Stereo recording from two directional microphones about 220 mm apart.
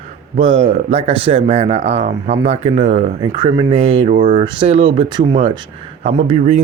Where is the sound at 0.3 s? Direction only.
25° right (ahead or behind).